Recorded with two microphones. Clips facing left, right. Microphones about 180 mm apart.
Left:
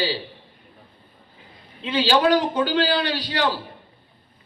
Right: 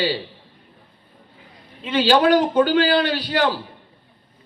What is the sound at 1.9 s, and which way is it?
A man's voice, 50° right (ahead or behind).